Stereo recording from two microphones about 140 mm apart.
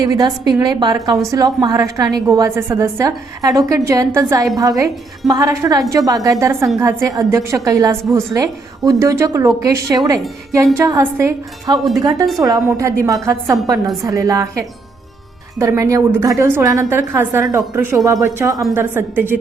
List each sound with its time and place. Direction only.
0.0 s a woman's voice: 30° right (ahead or behind)